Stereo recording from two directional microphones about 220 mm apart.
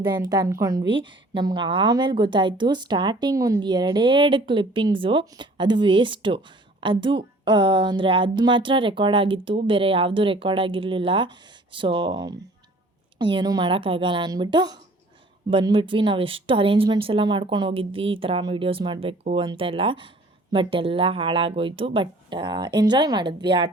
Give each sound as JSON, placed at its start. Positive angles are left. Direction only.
{"t": 0.0, "sound": "a woman's voice", "side_deg": -15}